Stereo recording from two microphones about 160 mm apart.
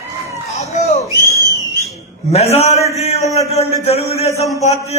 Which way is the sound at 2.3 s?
40° left (ahead or behind).